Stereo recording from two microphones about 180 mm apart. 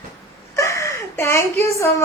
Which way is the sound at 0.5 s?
15° left (ahead or behind).